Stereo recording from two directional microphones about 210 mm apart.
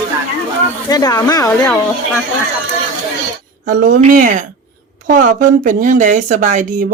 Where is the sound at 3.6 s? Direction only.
40° right (ahead or behind).